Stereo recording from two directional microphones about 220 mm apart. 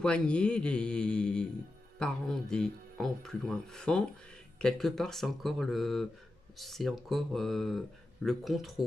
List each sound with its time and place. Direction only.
0.0 s speech: 5° left (ahead or behind)